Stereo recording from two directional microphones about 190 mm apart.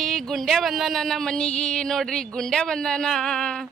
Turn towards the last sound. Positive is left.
turn(degrees=5)  # may be behind; listen again after turning